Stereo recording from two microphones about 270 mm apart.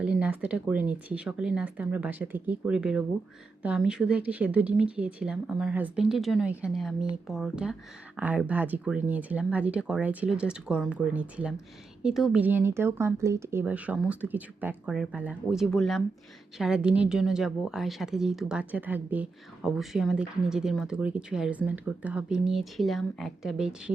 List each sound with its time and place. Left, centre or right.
0.0 s speech: centre